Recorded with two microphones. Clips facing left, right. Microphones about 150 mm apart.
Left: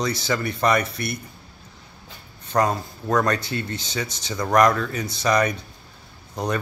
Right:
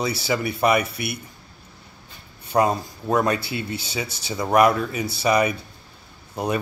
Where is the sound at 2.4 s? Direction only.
10° right (ahead or behind).